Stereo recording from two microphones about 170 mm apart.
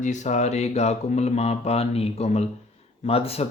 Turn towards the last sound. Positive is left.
turn(degrees=35)  # may be behind; listen again after turning